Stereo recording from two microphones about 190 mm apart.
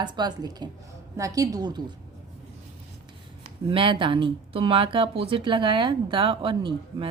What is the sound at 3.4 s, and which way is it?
Speech, 25° right (ahead or behind).